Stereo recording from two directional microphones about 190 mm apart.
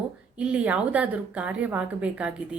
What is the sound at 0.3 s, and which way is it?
A woman's voice, 5° right (ahead or behind).